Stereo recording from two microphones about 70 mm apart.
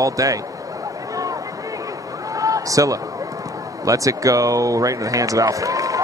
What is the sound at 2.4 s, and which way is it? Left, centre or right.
Run, right.